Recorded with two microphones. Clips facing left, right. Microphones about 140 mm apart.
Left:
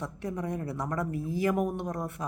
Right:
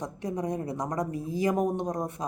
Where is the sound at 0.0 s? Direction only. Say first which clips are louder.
Right 2 dB; 15° right (ahead or behind).